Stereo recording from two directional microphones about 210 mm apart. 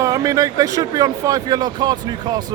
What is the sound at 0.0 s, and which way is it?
Speech, 15° right (ahead or behind).